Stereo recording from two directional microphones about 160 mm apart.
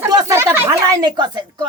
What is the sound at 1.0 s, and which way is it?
Speech, 25° right (ahead or behind).